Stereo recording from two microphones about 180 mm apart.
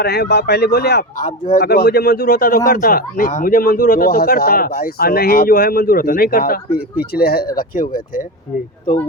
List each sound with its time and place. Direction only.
0.0 s speech: 65° left (ahead or behind); by 8.2 s 50° left (ahead or behind)